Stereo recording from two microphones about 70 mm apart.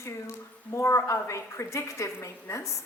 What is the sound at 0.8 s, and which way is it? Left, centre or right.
A woman's voice, left.